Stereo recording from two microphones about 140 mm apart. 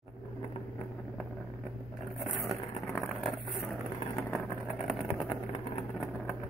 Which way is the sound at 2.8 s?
20° left (ahead or behind).